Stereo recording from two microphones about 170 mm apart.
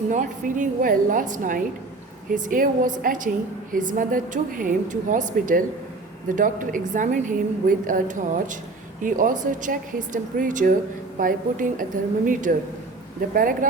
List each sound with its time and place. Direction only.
0.1 s a woman's voice: 50° right (ahead or behind)